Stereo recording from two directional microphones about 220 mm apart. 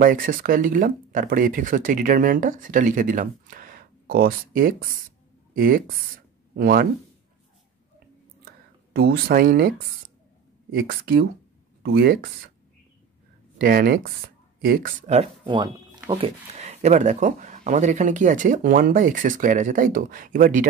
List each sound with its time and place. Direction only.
0.0 s speech: 40° right (ahead or behind)
8.9 s speech: 45° right (ahead or behind)
13.6 s speech: 40° right (ahead or behind); by 16.3 s 20° right (ahead or behind)
16.5 s speech: 30° right (ahead or behind)